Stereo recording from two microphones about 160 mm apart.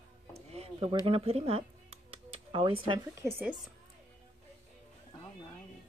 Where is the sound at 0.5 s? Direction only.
40° right (ahead or behind).